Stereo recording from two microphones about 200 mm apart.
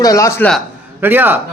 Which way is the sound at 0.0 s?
15° left (ahead or behind).